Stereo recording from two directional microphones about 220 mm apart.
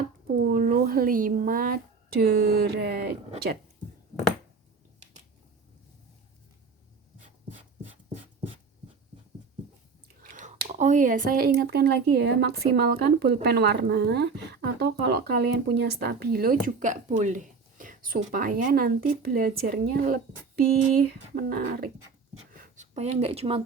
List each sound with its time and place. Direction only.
0.4 s speech: 40° right (ahead or behind)
10.2 s a woman's voice: 35° right (ahead or behind)
21.3 s a woman's voice: 40° right (ahead or behind)
22.5 s a sound: 35° right (ahead or behind)